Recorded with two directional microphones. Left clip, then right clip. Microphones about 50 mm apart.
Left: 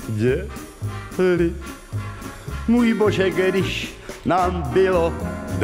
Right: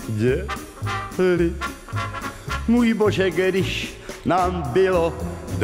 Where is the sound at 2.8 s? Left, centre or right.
Centre.